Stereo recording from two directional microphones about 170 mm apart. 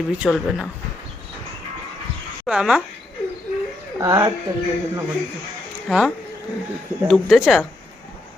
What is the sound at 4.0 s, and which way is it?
Speech, 20° right (ahead or behind).